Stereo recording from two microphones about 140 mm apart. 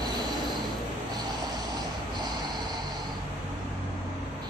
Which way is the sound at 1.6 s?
30° right (ahead or behind).